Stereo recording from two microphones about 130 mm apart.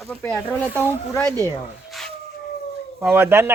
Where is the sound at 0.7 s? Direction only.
15° right (ahead or behind).